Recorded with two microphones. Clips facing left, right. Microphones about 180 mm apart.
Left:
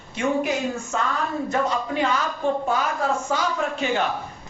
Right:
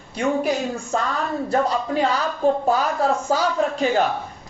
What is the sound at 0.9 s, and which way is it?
Speech, 35° right (ahead or behind).